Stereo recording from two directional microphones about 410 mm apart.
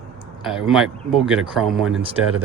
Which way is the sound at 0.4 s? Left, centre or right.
Centre.